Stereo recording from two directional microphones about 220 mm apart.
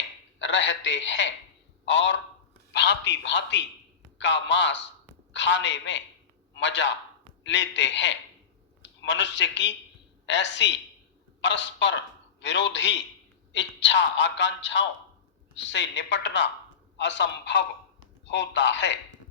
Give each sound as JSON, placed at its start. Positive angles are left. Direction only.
{"t": 0.3, "sound": "a man's voice", "side_deg": 55}